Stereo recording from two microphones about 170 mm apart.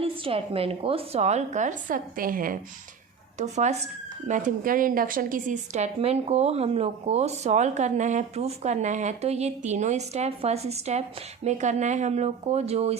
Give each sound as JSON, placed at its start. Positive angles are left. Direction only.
{"t": 0.0, "sound": "a woman's voice", "side_deg": -35}
{"t": 3.3, "sound": "a woman's voice", "side_deg": -45}